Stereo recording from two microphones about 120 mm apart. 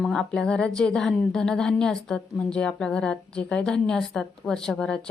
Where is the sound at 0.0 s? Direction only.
5° left (ahead or behind).